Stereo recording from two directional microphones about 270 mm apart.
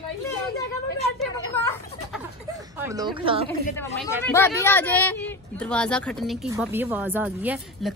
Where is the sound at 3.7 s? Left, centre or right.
Centre.